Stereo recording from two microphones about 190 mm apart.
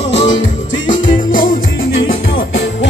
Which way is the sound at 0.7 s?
75° left (ahead or behind).